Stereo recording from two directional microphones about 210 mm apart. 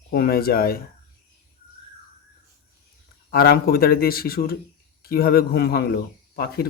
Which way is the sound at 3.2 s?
45° left (ahead or behind).